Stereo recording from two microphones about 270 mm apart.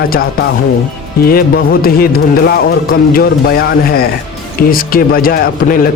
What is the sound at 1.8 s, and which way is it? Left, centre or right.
Speech, left.